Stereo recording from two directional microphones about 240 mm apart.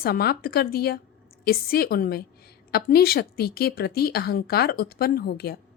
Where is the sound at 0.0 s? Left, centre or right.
Left.